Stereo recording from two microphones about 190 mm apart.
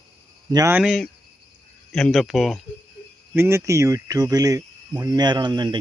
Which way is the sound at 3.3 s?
15° right (ahead or behind).